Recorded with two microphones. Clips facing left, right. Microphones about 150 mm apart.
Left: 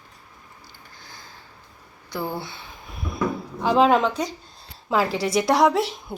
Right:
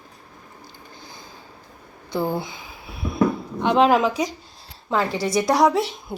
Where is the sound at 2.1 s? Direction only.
20° right (ahead or behind); by 3.2 s 5° right (ahead or behind).